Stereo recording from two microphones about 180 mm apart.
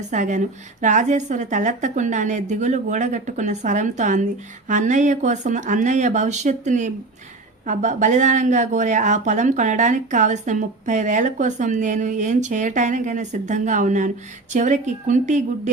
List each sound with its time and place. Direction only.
0.1 s speech: 45° right (ahead or behind)